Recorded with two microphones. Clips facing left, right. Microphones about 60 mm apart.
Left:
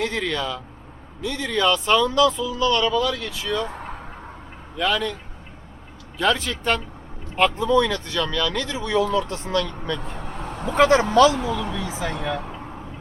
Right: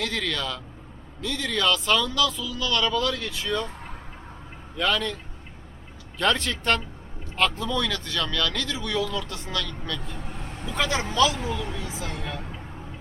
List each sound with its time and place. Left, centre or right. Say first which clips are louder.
0.0 s speech: left 4 dB; left
2.9 s speech: left 3 dB; centre
4.8 s speech: left 2 dB; centre
6.1 s speech: left 2 dB; centre
7.5 s speech: left 8 dB; left
10.2 s vehicle: left 5 dB; left
10.8 s speech: left 11 dB; left
11.3 s speech: left 5 dB; left
12.0 s speech: left 7 dB; left